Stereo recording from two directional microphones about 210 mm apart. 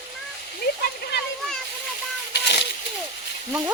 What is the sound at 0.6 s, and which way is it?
Waterfall, 50° left (ahead or behind).